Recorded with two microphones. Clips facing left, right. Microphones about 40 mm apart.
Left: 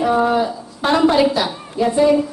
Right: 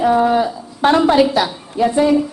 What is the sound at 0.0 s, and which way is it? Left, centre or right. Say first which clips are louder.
Speech: right 2 dB; centre.